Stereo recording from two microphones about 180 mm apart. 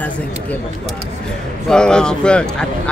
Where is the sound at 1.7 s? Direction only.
5° left (ahead or behind).